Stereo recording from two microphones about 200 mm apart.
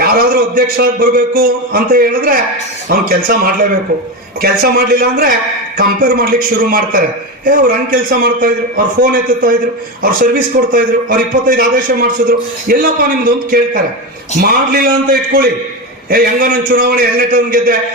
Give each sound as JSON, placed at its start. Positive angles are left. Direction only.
{"t": 0.0, "sound": "a man's voice", "side_deg": -50}
{"t": 14.4, "sound": "a man's voice", "side_deg": -50}